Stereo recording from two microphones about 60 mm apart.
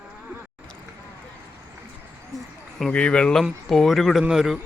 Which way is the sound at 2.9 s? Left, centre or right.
Left.